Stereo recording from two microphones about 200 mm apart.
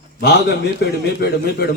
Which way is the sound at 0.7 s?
55° left (ahead or behind).